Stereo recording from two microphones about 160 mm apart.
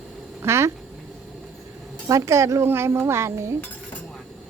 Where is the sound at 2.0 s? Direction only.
20° right (ahead or behind).